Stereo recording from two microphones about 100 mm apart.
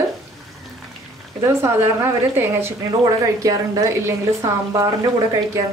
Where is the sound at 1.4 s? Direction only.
30° right (ahead or behind).